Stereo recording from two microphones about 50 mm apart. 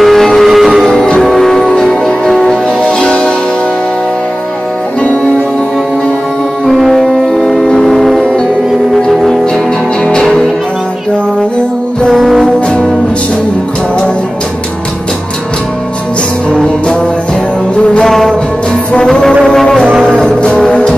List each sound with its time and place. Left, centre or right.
0.0 s music: centre
0.8 s music: centre
6.8 s music: centre
12.1 s music: centre
12.5 s music: centre
16.4 s music: centre
18.0 s music: centre
19.4 s brass instrument: centre
20.2 s music: centre